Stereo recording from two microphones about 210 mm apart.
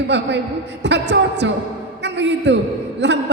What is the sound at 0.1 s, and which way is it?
A man's voice, 55° right (ahead or behind).